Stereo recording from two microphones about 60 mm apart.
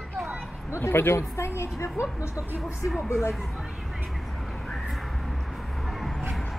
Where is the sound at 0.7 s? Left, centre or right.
Left.